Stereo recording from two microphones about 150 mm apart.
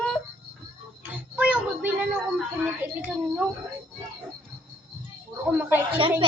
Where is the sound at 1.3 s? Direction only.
10° right (ahead or behind).